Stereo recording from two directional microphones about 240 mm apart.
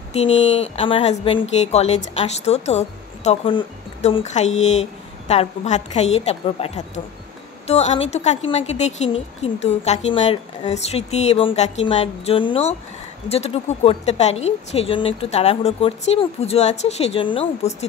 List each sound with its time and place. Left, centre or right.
0.1 s speech: left